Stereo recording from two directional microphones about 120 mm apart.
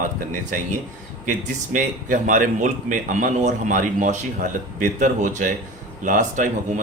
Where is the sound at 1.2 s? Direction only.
90° right.